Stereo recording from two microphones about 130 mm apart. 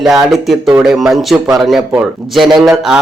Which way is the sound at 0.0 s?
5° right (ahead or behind).